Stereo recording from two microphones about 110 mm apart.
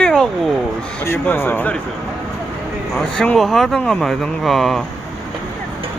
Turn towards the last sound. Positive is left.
turn(degrees=0)  # may be behind; listen again after turning